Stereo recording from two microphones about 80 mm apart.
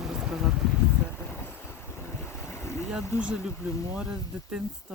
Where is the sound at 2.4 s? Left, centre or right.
Left.